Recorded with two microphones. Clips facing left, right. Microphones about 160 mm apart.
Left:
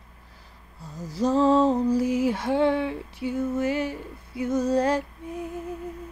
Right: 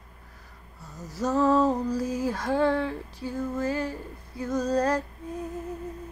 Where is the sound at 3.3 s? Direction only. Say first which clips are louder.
Left 3 dB; 25° left (ahead or behind).